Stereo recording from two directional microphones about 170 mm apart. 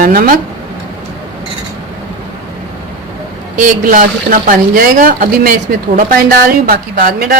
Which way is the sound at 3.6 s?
50° right (ahead or behind).